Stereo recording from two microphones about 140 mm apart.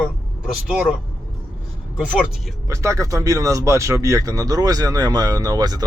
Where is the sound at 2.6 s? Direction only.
20° right (ahead or behind).